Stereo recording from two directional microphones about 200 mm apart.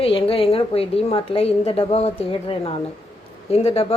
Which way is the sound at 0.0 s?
30° left (ahead or behind).